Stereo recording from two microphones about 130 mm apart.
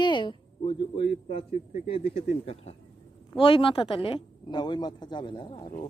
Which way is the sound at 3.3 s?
40° left (ahead or behind).